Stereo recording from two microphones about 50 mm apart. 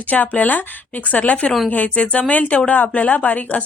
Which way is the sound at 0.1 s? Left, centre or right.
Left.